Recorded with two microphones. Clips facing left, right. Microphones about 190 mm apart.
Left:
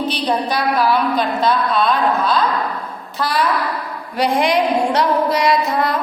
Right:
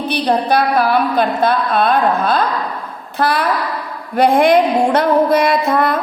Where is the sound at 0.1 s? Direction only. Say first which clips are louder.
Right 4 dB; 55° right (ahead or behind).